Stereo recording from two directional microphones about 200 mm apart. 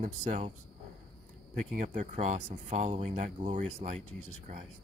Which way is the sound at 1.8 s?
40° right (ahead or behind).